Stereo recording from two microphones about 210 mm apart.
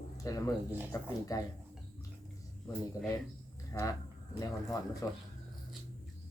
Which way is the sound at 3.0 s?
15° left (ahead or behind).